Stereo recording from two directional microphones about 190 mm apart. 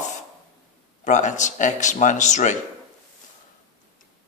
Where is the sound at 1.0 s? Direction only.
40° left (ahead or behind).